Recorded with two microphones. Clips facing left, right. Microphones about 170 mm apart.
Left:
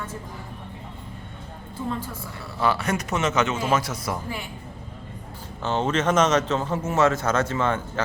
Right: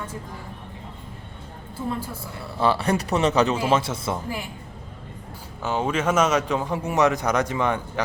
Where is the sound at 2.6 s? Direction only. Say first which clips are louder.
Right 2 dB; 30° right (ahead or behind).